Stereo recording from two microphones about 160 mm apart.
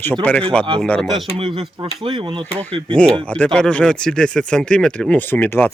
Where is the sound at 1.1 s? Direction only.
30° right (ahead or behind).